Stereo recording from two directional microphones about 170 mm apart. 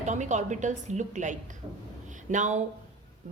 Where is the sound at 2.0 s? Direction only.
45° right (ahead or behind).